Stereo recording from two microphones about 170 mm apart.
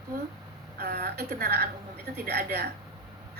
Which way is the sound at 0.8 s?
70° right (ahead or behind).